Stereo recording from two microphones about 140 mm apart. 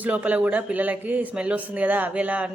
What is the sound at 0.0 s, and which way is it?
Speech, 10° right (ahead or behind).